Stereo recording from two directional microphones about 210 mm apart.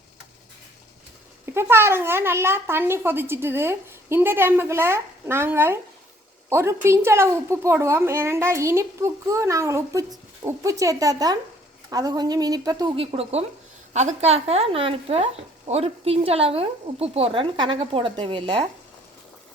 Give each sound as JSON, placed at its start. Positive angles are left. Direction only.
{"t": 1.5, "sound": "a woman's voice", "side_deg": -10}